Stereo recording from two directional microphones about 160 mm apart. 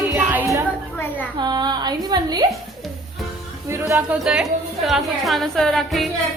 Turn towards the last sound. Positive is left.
turn(degrees=0)  # may be behind; listen again after turning